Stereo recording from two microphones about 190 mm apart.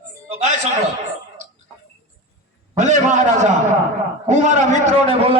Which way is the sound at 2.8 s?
40° right (ahead or behind).